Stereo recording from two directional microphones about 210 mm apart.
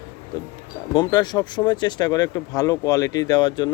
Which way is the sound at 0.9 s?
20° left (ahead or behind).